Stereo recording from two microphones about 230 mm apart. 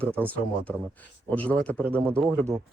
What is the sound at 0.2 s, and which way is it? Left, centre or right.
Speech, centre.